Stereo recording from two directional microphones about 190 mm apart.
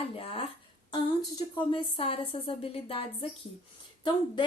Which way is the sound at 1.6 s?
30° left (ahead or behind).